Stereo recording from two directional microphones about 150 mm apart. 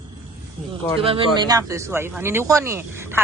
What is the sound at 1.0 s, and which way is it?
Speech, 40° right (ahead or behind).